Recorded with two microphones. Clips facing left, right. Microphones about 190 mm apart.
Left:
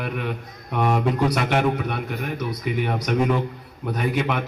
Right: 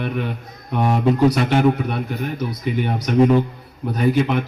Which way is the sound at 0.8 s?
30° right (ahead or behind).